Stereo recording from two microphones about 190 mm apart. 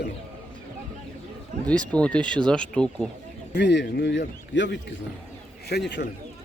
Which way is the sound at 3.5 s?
65° left (ahead or behind).